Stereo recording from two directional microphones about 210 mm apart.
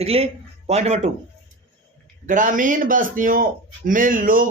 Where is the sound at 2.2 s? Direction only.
40° right (ahead or behind).